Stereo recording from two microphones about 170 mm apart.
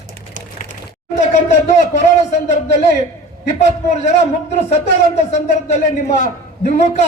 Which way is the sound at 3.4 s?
40° left (ahead or behind).